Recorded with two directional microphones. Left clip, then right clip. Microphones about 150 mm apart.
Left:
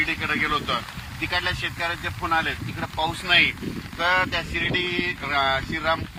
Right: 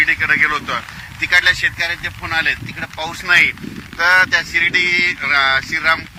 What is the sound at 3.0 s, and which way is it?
Speech, 15° right (ahead or behind).